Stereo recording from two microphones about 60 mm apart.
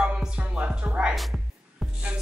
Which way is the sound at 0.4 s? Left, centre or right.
Centre.